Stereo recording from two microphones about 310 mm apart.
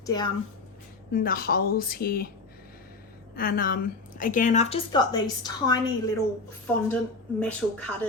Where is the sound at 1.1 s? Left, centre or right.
Left.